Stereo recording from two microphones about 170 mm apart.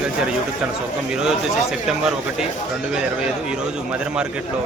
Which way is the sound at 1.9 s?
5° right (ahead or behind).